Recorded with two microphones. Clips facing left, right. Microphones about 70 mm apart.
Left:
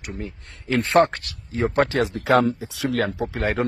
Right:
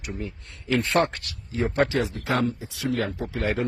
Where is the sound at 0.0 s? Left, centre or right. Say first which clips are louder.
Left 1 dB; left.